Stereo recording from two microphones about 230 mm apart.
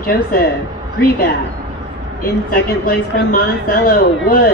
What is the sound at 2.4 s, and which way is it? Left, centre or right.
A woman's voice, left.